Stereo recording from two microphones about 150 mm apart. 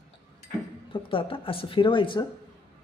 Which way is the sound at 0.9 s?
35° left (ahead or behind).